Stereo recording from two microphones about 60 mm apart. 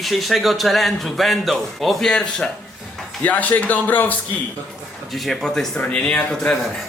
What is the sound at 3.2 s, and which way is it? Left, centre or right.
Speech, left.